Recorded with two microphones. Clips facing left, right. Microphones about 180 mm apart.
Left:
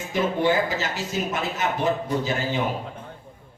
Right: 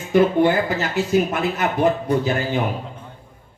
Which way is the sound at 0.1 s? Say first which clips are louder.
Right 7 dB; 55° right (ahead or behind).